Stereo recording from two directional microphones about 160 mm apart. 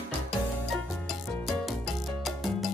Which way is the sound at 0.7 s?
Centre (ahead or behind).